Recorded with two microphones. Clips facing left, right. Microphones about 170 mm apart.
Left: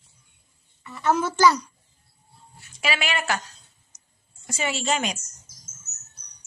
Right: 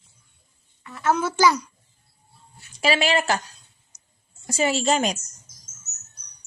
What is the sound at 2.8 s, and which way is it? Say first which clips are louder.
Speech: right 6 dB; 35° right (ahead or behind).